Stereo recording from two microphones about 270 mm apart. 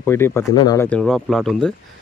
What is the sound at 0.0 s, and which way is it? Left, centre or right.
Speech, centre.